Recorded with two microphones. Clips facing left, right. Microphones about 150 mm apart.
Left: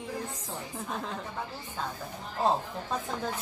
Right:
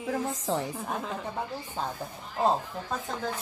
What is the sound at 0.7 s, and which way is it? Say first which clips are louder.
Speech: right 2 dB; 5° right (ahead or behind).